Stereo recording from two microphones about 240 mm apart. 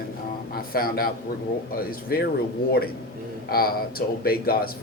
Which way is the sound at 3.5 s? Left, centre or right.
Left.